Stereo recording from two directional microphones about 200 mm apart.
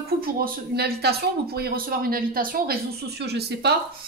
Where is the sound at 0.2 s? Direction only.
50° right (ahead or behind).